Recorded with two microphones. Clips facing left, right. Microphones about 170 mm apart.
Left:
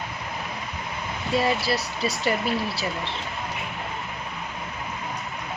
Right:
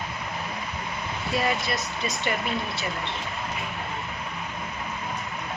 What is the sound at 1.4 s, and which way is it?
Speech, 35° left (ahead or behind).